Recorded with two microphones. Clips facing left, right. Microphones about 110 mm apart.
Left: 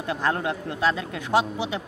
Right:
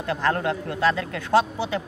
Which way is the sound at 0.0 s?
15° left (ahead or behind).